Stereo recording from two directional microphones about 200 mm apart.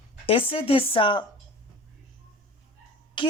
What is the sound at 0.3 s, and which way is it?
Speech, 25° left (ahead or behind).